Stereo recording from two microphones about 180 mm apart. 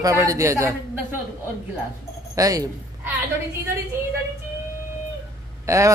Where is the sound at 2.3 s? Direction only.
20° right (ahead or behind).